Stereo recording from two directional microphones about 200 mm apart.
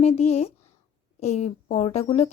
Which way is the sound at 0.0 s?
35° left (ahead or behind).